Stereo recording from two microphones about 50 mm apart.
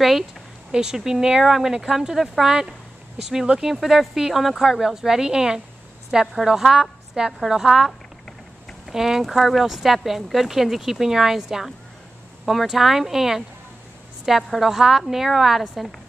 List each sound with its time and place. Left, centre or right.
0.7 s a woman's voice: centre
8.9 s speech: centre